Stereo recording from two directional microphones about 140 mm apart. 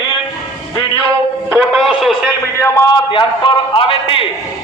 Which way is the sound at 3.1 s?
35° left (ahead or behind).